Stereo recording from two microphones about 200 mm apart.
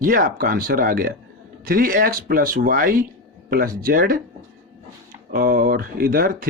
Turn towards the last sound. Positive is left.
turn(degrees=-45)  # may be behind; listen again after turning